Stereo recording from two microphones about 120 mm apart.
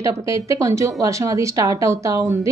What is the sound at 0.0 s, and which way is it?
A woman's voice, 25° right (ahead or behind).